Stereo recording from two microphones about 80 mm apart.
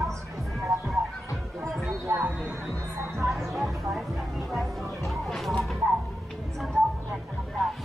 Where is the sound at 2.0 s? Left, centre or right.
Right.